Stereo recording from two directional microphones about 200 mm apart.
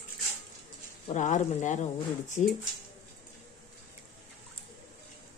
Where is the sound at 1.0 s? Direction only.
35° left (ahead or behind).